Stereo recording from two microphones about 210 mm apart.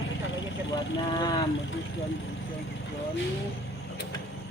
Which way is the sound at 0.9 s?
20° left (ahead or behind).